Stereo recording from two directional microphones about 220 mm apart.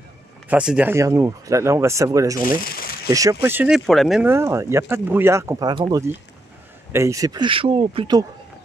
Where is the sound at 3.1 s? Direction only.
15° right (ahead or behind).